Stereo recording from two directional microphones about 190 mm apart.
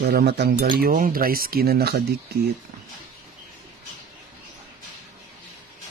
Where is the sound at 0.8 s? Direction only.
45° right (ahead or behind).